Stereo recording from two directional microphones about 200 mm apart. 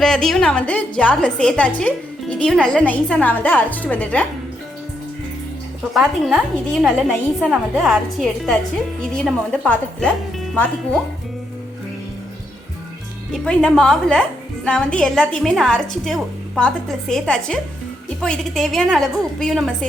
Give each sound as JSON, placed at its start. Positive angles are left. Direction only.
{"t": 0.0, "sound": "a woman's voice", "side_deg": 0}
{"t": 5.9, "sound": "a woman's voice", "side_deg": 0}
{"t": 13.3, "sound": "a woman's voice", "side_deg": 5}